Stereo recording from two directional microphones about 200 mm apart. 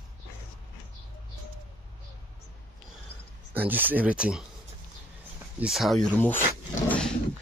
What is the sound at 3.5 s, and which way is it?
Speech, 10° right (ahead or behind).